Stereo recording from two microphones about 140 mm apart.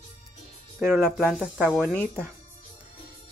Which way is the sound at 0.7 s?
10° right (ahead or behind).